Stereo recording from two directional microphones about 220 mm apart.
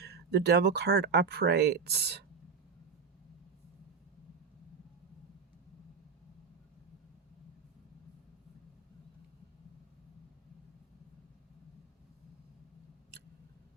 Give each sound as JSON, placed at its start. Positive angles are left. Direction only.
{"t": 0.0, "sound": "speech", "side_deg": -50}